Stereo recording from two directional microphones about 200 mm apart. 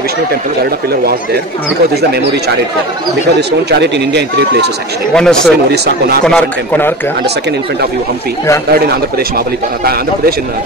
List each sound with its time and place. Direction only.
3.3 s speech: 55° right (ahead or behind)
5.1 s speech: 5° left (ahead or behind)
5.7 s speech: 50° right (ahead or behind)
6.2 s speech: 5° left (ahead or behind)